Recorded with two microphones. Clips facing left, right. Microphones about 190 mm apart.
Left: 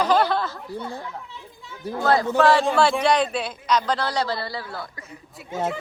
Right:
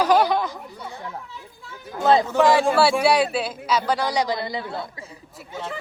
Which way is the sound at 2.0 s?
20° right (ahead or behind).